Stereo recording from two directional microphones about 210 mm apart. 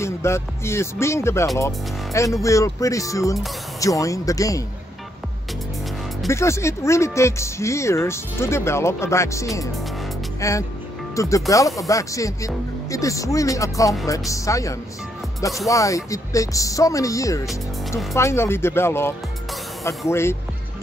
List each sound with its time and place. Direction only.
0.0 s speech: 15° left (ahead or behind)
6.2 s speech: 15° left (ahead or behind)